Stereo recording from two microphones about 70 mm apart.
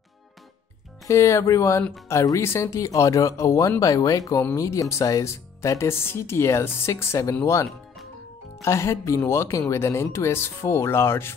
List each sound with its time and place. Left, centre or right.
1.0 s speech: left
3.8 s speech: left
8.6 s speech: left